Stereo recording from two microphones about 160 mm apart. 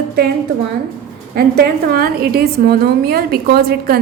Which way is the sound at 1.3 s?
70° right (ahead or behind).